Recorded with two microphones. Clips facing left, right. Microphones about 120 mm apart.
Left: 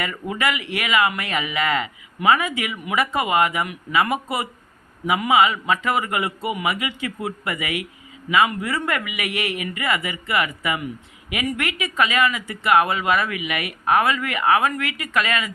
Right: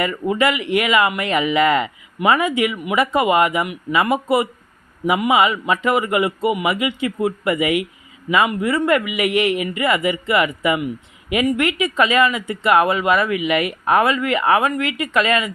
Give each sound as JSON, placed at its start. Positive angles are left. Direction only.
{"t": 0.0, "sound": "speech", "side_deg": -25}